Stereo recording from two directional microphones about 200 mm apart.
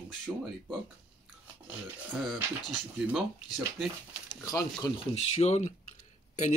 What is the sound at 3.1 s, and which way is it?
Speech, centre (ahead or behind).